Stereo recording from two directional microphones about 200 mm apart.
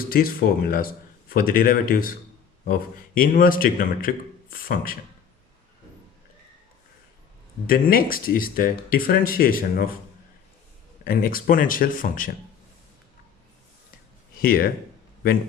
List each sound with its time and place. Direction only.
0.1 s speech: 45° left (ahead or behind)
3.2 s speech: 45° left (ahead or behind)
7.7 s speech: 45° left (ahead or behind)
11.0 s speech: 45° left (ahead or behind)
14.3 s speech: 45° left (ahead or behind)